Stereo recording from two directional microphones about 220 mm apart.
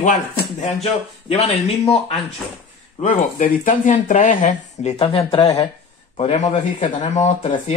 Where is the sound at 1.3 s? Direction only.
30° left (ahead or behind).